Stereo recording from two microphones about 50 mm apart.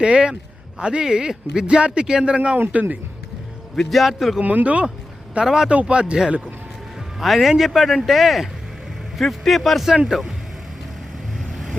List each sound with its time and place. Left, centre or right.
0.0 s speech: centre
3.8 s a man's voice: centre
4.4 s speech: right
7.2 s a man's voice: centre